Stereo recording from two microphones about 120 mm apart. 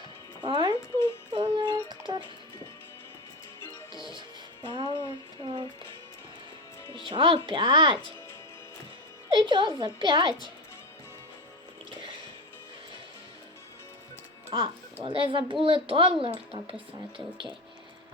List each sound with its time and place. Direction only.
0.4 s music: 40° right (ahead or behind)
3.9 s music: 40° right (ahead or behind)
6.9 s speech: 45° right (ahead or behind)
9.3 s a woman's voice: 40° right (ahead or behind)
14.5 s speech: 40° right (ahead or behind)